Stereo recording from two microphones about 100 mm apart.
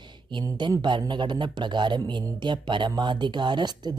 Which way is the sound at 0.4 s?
40° right (ahead or behind).